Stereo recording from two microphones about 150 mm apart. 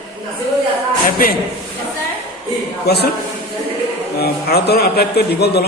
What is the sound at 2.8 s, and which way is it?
Speech, 90° left.